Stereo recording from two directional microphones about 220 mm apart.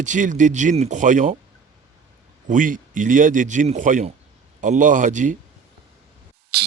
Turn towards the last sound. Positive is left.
turn(degrees=-45)  # may be behind; listen again after turning